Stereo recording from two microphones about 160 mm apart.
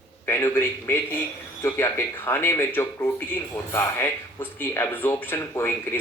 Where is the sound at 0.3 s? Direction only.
15° left (ahead or behind).